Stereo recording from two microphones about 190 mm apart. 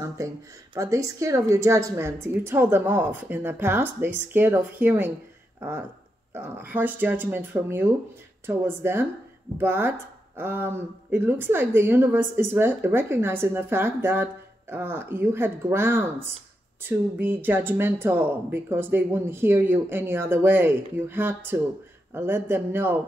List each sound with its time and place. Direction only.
0.2 s speech: 15° right (ahead or behind)